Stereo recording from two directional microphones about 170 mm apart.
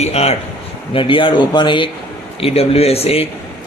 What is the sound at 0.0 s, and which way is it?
Speech, 40° left (ahead or behind).